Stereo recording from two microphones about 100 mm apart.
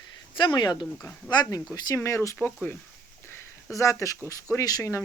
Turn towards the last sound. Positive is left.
turn(degrees=30)  # may be behind; listen again after turning